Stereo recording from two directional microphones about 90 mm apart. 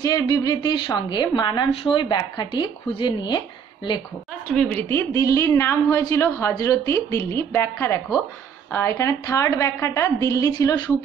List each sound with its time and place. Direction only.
0.0 s a woman's voice: 40° left (ahead or behind)
1.7 s a woman's voice: 80° left; by 2.7 s 55° left (ahead or behind)
2.9 s a woman's voice: 65° left (ahead or behind)
4.7 s a woman's voice: 25° left (ahead or behind)